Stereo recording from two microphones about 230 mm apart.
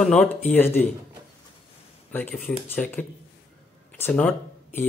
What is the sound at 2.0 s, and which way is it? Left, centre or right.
Speech, centre.